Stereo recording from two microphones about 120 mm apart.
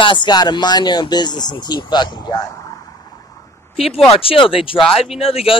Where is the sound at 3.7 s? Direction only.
55° left (ahead or behind).